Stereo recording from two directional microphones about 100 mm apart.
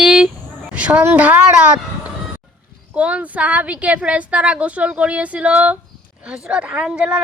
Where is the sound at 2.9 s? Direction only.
15° right (ahead or behind).